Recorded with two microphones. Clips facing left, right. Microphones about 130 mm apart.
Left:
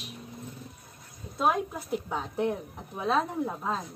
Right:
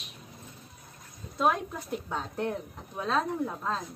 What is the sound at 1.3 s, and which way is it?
Speech, 5° left (ahead or behind).